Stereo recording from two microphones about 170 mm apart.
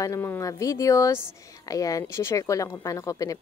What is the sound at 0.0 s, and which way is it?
Speech, 15° left (ahead or behind).